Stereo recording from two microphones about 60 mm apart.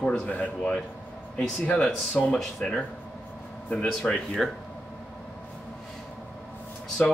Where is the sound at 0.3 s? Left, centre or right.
Left.